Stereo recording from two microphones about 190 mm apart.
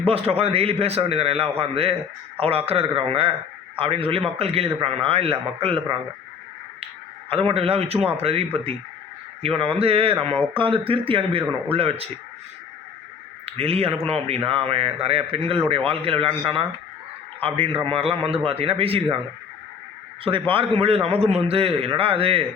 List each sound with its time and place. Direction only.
0.0 s a man's voice: 30° right (ahead or behind)
7.3 s a man's voice: 30° right (ahead or behind)
13.4 s a man's voice: 30° right (ahead or behind)
20.5 s a man's voice: 30° right (ahead or behind)